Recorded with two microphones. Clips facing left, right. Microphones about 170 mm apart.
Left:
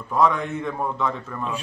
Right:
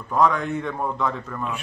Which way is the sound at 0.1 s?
Centre (ahead or behind).